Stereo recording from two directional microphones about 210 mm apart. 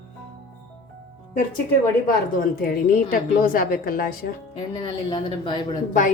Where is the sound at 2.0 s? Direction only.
45° left (ahead or behind).